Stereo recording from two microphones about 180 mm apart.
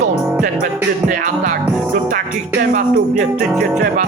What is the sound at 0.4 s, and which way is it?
Music, 45° right (ahead or behind).